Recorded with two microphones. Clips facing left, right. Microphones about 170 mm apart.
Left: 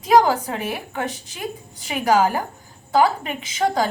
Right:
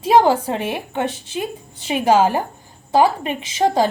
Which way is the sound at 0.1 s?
30° right (ahead or behind).